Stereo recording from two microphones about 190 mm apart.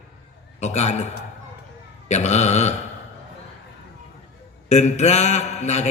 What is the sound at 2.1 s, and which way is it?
Speech, 35° left (ahead or behind).